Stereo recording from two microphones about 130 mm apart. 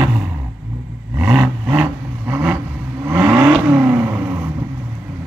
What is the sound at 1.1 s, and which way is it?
Vehicle, 20° right (ahead or behind).